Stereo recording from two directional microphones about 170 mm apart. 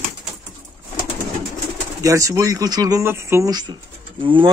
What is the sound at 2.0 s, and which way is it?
Speech, 20° right (ahead or behind).